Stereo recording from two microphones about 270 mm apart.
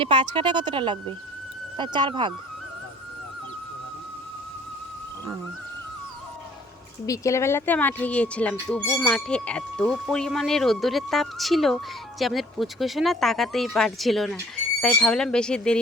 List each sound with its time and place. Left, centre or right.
0.0 s speech: centre
7.0 s a woman's voice: centre